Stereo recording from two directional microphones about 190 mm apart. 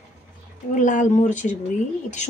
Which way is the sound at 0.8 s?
40° left (ahead or behind).